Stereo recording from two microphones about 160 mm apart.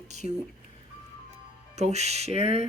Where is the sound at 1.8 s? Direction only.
45° right (ahead or behind).